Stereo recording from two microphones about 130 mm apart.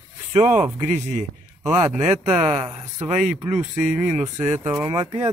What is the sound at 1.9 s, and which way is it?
Speech, 5° right (ahead or behind).